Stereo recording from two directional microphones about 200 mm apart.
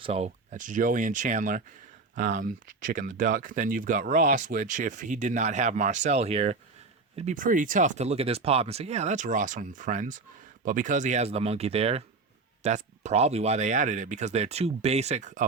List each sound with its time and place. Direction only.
0.0 s speech: 30° right (ahead or behind)